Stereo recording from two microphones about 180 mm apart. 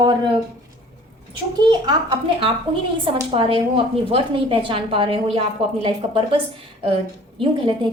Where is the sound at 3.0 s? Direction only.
30° right (ahead or behind).